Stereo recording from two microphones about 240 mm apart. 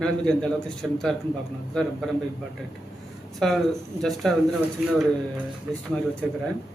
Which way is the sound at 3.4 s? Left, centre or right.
Centre.